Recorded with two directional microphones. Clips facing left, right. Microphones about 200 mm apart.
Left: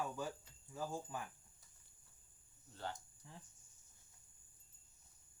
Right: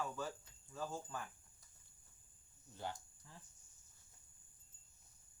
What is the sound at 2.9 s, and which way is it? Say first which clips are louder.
Speech: left 1 dB; 20° left (ahead or behind).